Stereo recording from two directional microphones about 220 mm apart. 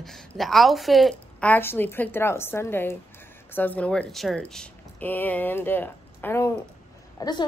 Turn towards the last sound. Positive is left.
turn(degrees=20)  # may be behind; listen again after turning